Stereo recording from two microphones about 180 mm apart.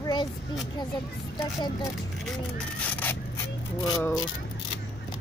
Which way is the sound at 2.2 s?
5° left (ahead or behind).